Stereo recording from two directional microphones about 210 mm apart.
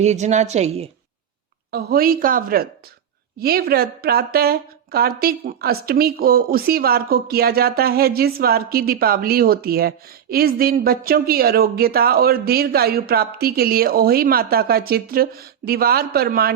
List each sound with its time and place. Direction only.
0.0 s a woman's voice: 35° right (ahead or behind)
1.7 s a woman's voice: 45° right (ahead or behind)